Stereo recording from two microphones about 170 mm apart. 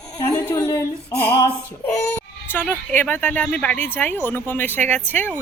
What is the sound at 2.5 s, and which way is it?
Speech, 10° left (ahead or behind).